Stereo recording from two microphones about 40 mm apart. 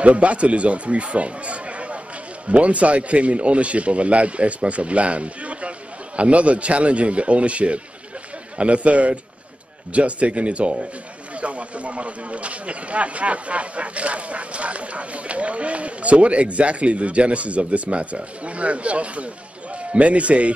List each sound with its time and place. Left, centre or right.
0.0 s speech: right